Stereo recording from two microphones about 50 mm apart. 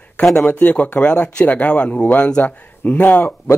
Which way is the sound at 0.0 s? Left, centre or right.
Left.